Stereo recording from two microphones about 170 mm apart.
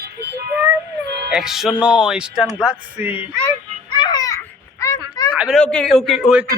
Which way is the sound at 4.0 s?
25° left (ahead or behind).